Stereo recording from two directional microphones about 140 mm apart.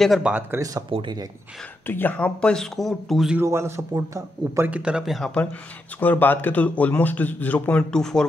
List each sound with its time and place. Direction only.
0.0 s speech: centre (ahead or behind)
0.3 s speech: 15° right (ahead or behind)
0.9 s speech: 40° right (ahead or behind)
1.9 s speech: 15° left (ahead or behind)
3.3 s a man's voice: 20° right (ahead or behind)
4.6 s a man's voice: 10° right (ahead or behind)